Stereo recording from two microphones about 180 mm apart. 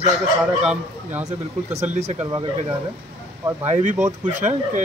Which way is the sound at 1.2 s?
40° right (ahead or behind).